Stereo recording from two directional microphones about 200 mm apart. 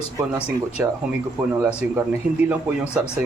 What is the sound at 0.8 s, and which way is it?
A man's voice, 10° right (ahead or behind).